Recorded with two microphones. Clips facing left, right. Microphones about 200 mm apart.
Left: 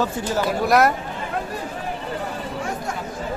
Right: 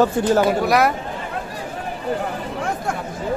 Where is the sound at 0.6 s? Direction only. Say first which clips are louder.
Even; centre (ahead or behind).